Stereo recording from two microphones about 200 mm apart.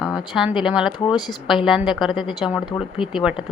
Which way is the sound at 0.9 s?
20° left (ahead or behind).